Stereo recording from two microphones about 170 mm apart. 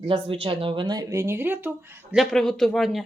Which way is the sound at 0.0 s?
30° right (ahead or behind).